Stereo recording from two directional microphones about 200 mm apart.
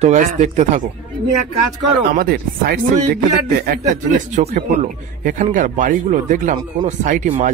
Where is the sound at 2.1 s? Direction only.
50° right (ahead or behind).